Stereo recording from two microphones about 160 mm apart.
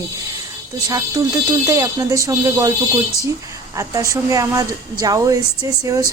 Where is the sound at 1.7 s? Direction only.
20° right (ahead or behind).